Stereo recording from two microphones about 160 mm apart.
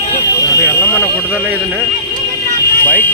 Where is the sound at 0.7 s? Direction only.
15° left (ahead or behind).